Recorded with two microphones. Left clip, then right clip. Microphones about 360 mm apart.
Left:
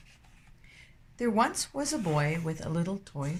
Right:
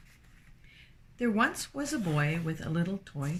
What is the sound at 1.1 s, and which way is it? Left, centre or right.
Speech, centre.